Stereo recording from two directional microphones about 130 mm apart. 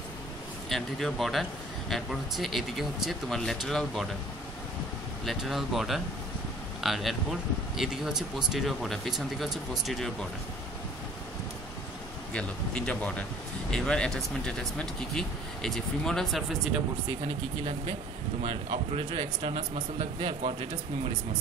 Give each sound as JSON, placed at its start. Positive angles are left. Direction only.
{"t": 0.7, "sound": "speech", "side_deg": 0}
{"t": 5.2, "sound": "speech", "side_deg": 0}
{"t": 12.3, "sound": "speech", "side_deg": 10}
{"t": 18.4, "sound": "a man's voice", "side_deg": -45}